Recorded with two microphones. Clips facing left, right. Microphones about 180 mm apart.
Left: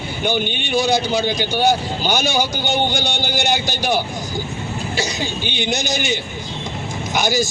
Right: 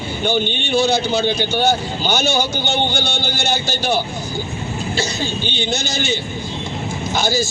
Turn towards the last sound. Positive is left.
turn(degrees=15)  # may be behind; listen again after turning